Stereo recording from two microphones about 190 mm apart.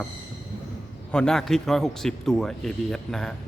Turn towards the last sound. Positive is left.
turn(degrees=5)  # may be behind; listen again after turning